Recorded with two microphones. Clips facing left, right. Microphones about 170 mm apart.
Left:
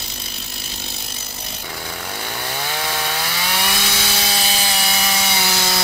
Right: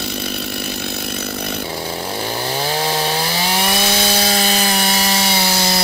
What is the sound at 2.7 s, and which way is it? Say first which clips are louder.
Chainsaw: right 6 dB; 30° right (ahead or behind).